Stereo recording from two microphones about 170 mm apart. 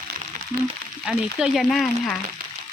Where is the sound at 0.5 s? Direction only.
50° right (ahead or behind).